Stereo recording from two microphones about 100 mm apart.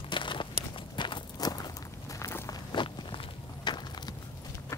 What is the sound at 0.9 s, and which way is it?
Clip-clop, 50° left (ahead or behind).